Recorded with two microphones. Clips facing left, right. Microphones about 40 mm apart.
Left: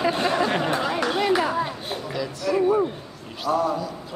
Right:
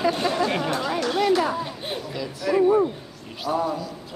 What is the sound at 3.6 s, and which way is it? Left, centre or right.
Speech, centre.